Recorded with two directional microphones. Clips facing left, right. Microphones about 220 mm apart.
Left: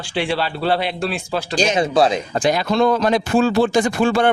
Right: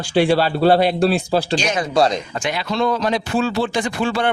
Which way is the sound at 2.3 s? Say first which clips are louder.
Left 5 dB; 40° left (ahead or behind).